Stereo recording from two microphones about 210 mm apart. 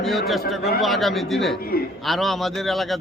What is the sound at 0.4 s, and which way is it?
Speech, 45° left (ahead or behind).